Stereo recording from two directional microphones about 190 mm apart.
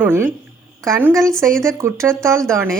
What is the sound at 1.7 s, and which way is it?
Speech, 15° right (ahead or behind).